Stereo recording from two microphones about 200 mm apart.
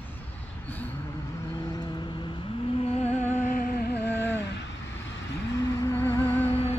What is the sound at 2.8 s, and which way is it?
Music, 35° left (ahead or behind).